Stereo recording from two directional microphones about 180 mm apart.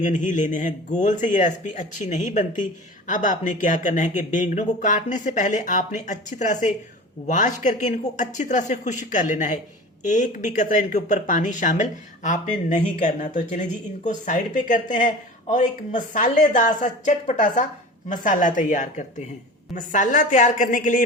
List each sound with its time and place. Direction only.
0.0 s speech: 45° left (ahead or behind)